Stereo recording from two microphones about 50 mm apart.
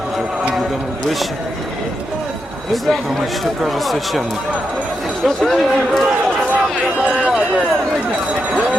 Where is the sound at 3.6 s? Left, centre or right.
Centre.